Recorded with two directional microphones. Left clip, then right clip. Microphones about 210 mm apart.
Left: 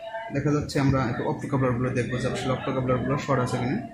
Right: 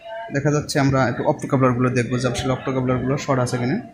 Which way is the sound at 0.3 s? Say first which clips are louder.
Right 6 dB; 50° right (ahead or behind).